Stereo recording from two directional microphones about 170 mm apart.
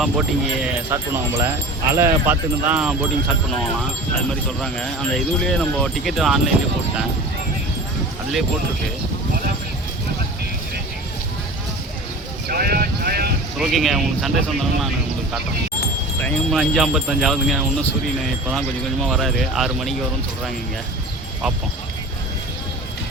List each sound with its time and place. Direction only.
0.0 s speech: 5° right (ahead or behind)
0.9 s speech: 15° right (ahead or behind)
4.6 s speech: 5° left (ahead or behind)
12.5 s a sound: 65° right (ahead or behind)
13.6 s speech: centre (ahead or behind)